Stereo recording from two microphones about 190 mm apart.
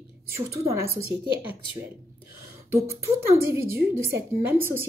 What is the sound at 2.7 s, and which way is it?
Speech, 15° right (ahead or behind).